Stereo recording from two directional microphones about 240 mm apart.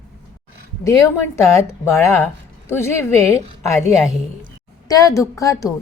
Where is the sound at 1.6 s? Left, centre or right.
Centre.